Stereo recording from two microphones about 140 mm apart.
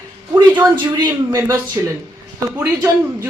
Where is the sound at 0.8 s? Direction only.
30° right (ahead or behind).